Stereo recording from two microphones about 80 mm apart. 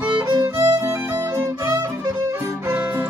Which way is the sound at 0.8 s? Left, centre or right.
Right.